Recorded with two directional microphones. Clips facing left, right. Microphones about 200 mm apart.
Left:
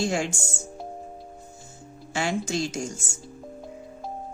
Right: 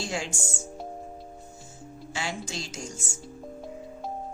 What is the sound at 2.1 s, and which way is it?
Speech, 50° left (ahead or behind).